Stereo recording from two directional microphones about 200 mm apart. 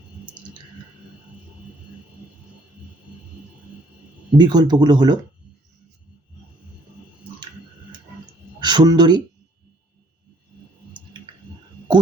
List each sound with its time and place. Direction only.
4.4 s speech: 20° right (ahead or behind)
8.6 s speech: 20° right (ahead or behind)